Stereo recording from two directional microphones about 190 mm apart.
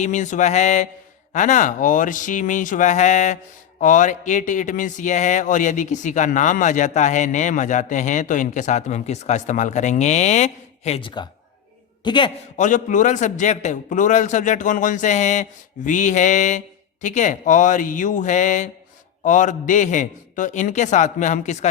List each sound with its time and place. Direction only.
0.0 s a man's voice: 40° left (ahead or behind); by 12.3 s 25° left (ahead or behind)
12.5 s a man's voice: 40° left (ahead or behind)